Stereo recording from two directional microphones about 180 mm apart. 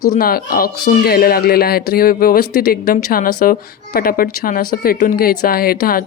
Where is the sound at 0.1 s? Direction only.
55° left (ahead or behind).